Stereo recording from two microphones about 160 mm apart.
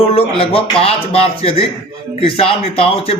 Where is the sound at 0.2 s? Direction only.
35° left (ahead or behind).